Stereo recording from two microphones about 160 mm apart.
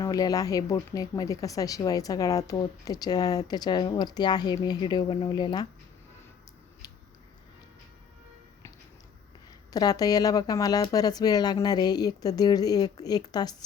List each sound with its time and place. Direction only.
0.0 s speech: 20° left (ahead or behind)
6.8 s a sound: 25° left (ahead or behind)
9.7 s speech: 25° left (ahead or behind)